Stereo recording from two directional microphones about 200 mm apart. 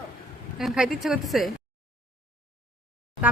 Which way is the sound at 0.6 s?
5° right (ahead or behind).